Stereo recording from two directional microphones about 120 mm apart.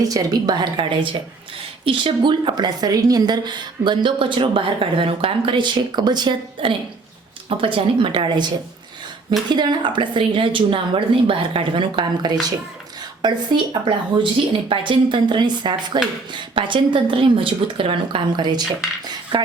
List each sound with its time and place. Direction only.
0.0 s a woman's voice: 30° right (ahead or behind); by 8.4 s 45° right (ahead or behind)
9.6 s a woman's voice: 40° right (ahead or behind)